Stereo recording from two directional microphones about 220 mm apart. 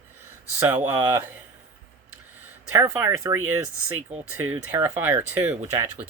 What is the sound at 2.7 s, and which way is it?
Speech, 10° right (ahead or behind).